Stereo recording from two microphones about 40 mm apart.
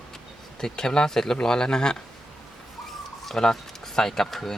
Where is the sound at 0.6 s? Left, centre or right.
Centre.